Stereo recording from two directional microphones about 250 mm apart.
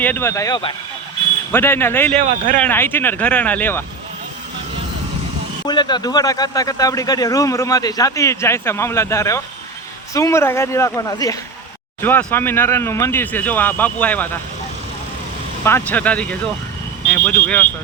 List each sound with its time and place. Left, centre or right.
0.0 s speech: centre
2.1 s speech: right
2.6 s speech: centre
5.6 s speech: centre
15.6 s speech: centre